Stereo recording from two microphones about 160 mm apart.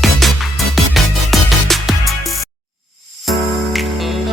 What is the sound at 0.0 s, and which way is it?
Music, centre (ahead or behind).